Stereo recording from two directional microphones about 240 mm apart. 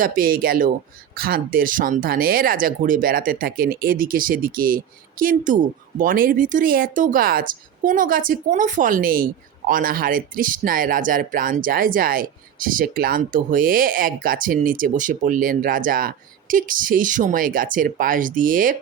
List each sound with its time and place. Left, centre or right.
0.0 s speech: right